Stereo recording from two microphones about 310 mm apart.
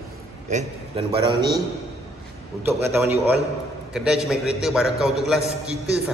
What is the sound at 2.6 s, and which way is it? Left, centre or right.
A man's voice, centre.